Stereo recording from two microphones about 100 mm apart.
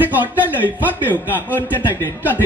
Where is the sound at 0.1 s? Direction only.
20° right (ahead or behind).